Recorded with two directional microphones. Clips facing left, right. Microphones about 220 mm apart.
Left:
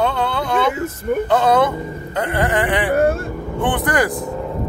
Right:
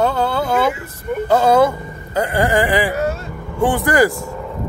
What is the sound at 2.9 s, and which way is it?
Speech, 55° left (ahead or behind).